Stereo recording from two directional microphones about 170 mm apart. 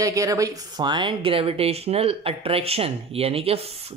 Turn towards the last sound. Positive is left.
turn(degrees=-35)  # may be behind; listen again after turning